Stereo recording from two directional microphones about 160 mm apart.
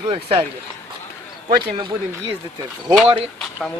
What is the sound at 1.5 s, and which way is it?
A man's voice, 30° right (ahead or behind).